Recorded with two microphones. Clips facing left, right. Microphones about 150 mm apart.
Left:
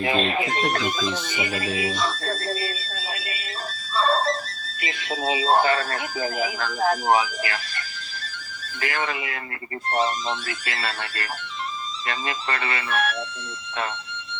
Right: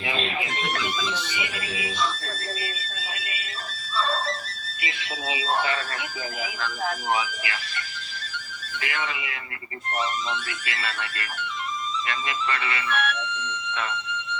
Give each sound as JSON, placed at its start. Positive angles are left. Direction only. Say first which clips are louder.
{"t": 0.0, "sound": "speech", "louder": "left 6 dB", "side_deg": 45}
{"t": 3.9, "sound": "music", "louder": "left 5 dB", "side_deg": 40}
{"t": 4.8, "sound": "speech", "louder": "left 6 dB", "side_deg": 40}
{"t": 8.8, "sound": "speech", "louder": "left 4 dB", "side_deg": 40}
{"t": 9.9, "sound": "speech", "louder": "left 4 dB", "side_deg": 35}